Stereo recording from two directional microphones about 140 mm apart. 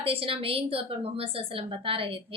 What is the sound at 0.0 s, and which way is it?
A woman's voice, 40° right (ahead or behind).